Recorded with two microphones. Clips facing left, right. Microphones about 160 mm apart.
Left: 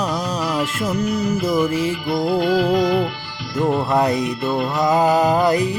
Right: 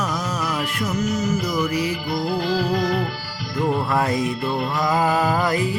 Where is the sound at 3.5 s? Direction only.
20° left (ahead or behind).